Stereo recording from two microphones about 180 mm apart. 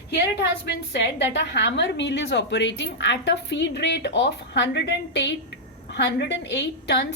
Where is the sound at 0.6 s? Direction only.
70° left (ahead or behind).